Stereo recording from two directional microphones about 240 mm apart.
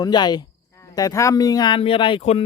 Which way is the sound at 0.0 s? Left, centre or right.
Centre.